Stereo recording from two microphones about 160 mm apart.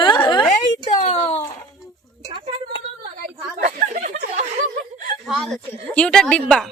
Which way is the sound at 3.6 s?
50° right (ahead or behind).